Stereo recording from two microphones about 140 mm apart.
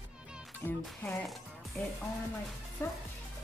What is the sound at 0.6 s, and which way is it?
Speech, 15° left (ahead or behind).